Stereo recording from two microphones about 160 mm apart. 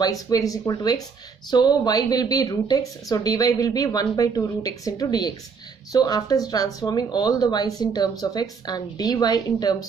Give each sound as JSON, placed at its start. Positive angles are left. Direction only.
{"t": 0.0, "sound": "speech", "side_deg": 25}